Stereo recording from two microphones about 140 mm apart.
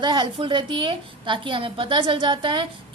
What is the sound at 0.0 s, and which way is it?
A woman's voice, 35° right (ahead or behind).